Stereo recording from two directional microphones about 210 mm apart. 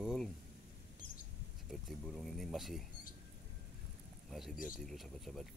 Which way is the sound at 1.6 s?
Centre (ahead or behind).